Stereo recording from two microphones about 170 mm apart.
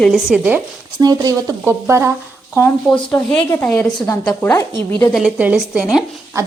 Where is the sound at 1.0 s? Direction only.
20° right (ahead or behind).